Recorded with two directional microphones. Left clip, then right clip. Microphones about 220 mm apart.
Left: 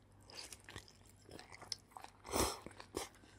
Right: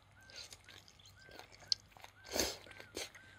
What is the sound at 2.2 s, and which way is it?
Biting, 15° left (ahead or behind).